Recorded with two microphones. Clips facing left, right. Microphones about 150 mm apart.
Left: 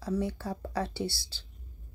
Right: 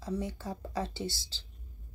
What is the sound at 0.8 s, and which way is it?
Speech, 15° left (ahead or behind).